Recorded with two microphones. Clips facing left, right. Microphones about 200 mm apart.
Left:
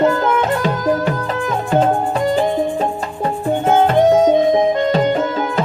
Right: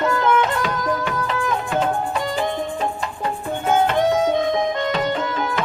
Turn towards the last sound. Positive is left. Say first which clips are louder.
# left 7 dB
turn(degrees=40)  # may be behind; listen again after turning